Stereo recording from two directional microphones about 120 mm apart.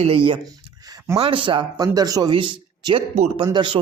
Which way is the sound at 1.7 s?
30° right (ahead or behind).